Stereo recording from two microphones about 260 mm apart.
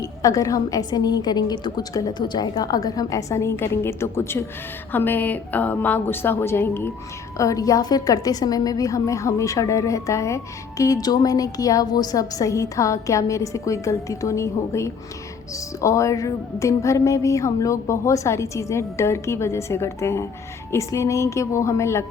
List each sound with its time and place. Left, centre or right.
0.0 s a woman's voice: centre